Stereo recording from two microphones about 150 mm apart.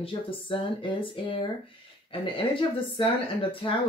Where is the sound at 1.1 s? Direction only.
35° left (ahead or behind).